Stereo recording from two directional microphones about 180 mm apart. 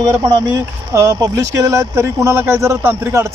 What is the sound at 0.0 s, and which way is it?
Speech, 20° right (ahead or behind).